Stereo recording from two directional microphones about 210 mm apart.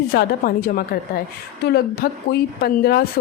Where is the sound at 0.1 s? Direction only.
45° left (ahead or behind).